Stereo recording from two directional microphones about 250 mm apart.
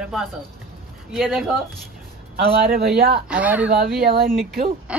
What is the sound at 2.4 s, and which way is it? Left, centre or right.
Speech, right.